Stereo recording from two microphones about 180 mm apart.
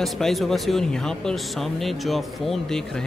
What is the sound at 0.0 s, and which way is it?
A man's voice, centre (ahead or behind).